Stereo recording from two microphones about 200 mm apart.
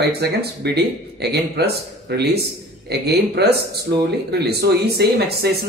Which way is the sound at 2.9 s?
55° right (ahead or behind).